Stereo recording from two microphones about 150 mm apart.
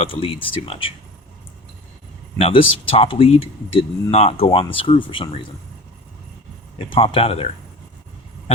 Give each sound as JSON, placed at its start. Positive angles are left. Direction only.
{"t": 0.0, "sound": "speech", "side_deg": 40}
{"t": 2.4, "sound": "speech", "side_deg": 40}
{"t": 6.7, "sound": "speech", "side_deg": 40}